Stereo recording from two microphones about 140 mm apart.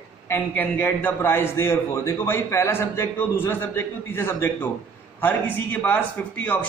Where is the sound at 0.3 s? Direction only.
15° left (ahead or behind).